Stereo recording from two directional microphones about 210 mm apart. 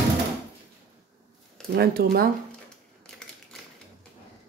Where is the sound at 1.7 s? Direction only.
50° right (ahead or behind).